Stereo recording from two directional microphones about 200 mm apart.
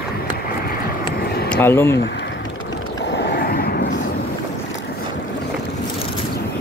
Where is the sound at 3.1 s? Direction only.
50° left (ahead or behind).